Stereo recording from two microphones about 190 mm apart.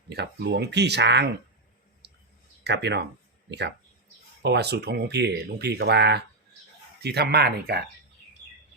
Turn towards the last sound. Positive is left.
turn(degrees=-55)  # may be behind; listen again after turning